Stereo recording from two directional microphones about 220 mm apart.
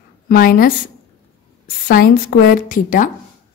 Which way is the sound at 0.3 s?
40° left (ahead or behind).